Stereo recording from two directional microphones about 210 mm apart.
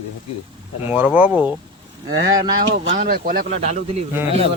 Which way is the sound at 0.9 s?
5° right (ahead or behind).